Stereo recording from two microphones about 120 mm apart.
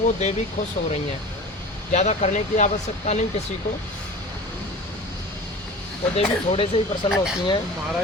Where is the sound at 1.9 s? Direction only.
70° left (ahead or behind).